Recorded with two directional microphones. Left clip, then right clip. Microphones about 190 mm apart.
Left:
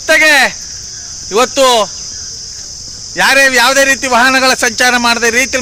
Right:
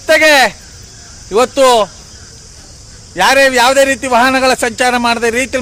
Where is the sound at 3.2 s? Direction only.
5° left (ahead or behind).